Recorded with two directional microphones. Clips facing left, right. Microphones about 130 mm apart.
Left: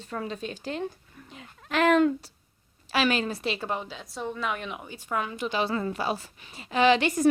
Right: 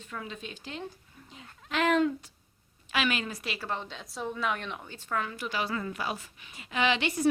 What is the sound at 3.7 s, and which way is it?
A woman's voice, 10° left (ahead or behind).